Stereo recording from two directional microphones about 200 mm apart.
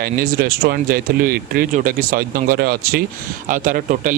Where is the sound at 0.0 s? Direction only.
45° right (ahead or behind).